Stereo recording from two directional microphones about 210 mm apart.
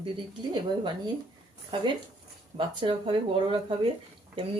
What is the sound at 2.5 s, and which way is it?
Speech, 25° right (ahead or behind).